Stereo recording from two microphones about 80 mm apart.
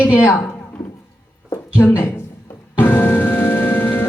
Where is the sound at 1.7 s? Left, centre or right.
Left.